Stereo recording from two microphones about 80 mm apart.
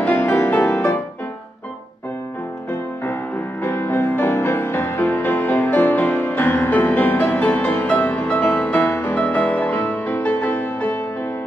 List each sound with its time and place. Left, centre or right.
0.0 s music: left
3.1 s music: left
8.8 s music: left
9.1 s music: centre